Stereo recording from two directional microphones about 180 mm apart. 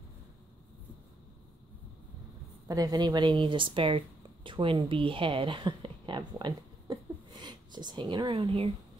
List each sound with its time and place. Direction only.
2.7 s speech: 20° right (ahead or behind)